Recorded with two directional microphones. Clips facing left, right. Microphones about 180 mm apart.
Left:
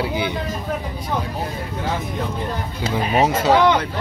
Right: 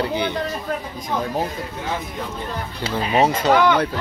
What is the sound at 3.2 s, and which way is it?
Speech, 5° left (ahead or behind).